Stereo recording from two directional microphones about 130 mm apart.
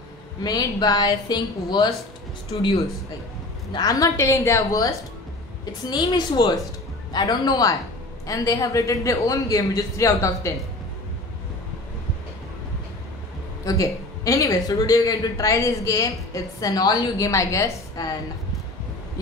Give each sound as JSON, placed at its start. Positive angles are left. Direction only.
{"t": 0.4, "sound": "a woman's voice", "side_deg": 30}
{"t": 3.7, "sound": "a woman's voice", "side_deg": 30}
{"t": 13.7, "sound": "speech", "side_deg": 25}